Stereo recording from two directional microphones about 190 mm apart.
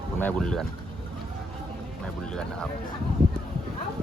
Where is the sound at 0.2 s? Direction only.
5° left (ahead or behind).